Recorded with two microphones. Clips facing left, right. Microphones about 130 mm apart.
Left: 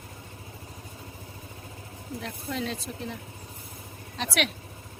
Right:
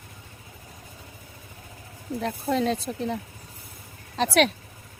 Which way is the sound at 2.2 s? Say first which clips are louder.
Right 9 dB; 40° right (ahead or behind).